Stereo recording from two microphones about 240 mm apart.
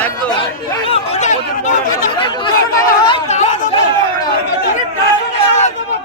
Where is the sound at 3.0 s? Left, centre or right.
Left.